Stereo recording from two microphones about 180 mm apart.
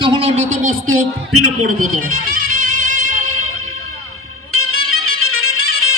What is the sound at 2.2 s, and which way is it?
Music, 50° right (ahead or behind).